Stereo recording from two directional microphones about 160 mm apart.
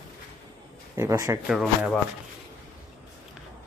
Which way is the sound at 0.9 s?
20° right (ahead or behind).